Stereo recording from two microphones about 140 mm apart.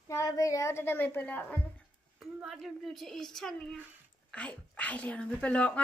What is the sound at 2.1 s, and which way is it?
A woman's voice, centre (ahead or behind).